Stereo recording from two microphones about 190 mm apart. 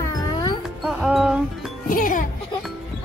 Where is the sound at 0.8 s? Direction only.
5° right (ahead or behind).